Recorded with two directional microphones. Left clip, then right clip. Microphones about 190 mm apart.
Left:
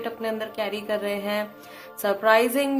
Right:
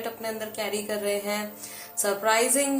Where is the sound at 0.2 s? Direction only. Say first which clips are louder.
Left 3 dB; 40° left (ahead or behind).